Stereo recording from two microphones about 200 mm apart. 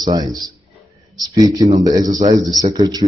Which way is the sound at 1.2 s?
20° right (ahead or behind).